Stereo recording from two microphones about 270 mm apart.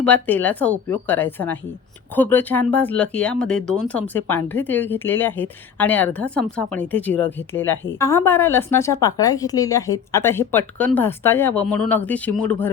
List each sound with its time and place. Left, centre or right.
0.0 s speech: centre